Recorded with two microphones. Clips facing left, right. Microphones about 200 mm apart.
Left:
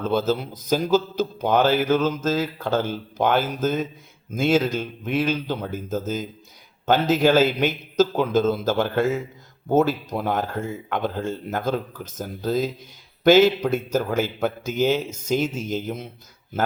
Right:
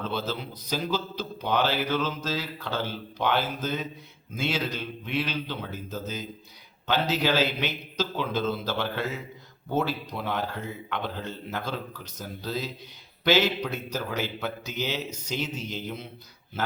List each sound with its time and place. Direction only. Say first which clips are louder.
0.0 s speech: left 9 dB; 45° left (ahead or behind)